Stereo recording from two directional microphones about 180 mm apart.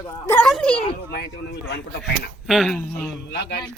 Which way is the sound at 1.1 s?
65° left (ahead or behind).